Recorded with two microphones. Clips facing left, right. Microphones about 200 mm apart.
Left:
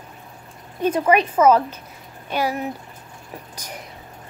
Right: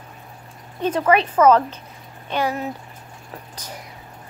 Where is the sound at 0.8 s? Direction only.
10° left (ahead or behind).